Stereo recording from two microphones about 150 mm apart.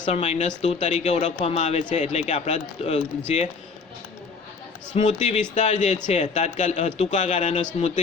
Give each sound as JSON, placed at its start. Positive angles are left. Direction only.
{"t": 0.0, "sound": "speech", "side_deg": 50}
{"t": 4.9, "sound": "speech", "side_deg": 50}